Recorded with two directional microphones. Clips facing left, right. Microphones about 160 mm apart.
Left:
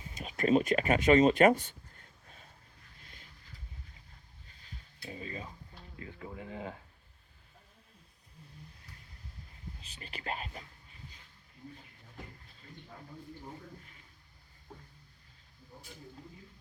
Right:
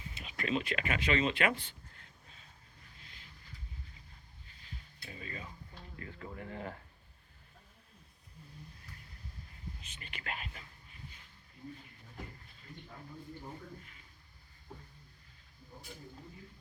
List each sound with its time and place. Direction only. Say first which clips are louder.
0.1 s speech: left 8 dB; 45° left (ahead or behind)
5.0 s stir: left 4 dB; 30° left (ahead or behind)
6.0 s speech: left 1 dB; 15° left (ahead or behind)
9.8 s speech: left 7 dB; 35° left (ahead or behind)